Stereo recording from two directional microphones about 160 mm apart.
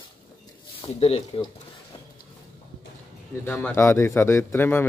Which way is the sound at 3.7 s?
15° left (ahead or behind).